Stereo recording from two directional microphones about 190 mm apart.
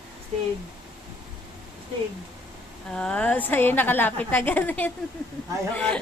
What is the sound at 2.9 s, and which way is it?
A woman's voice, 5° left (ahead or behind).